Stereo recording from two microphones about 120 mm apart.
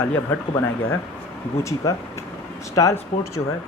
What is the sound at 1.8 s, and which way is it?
Speech, 25° left (ahead or behind).